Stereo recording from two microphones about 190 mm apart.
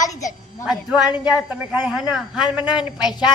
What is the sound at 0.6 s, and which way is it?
A woman's voice, 5° right (ahead or behind).